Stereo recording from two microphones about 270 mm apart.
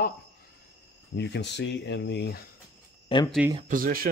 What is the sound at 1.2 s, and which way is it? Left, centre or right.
Speech, left.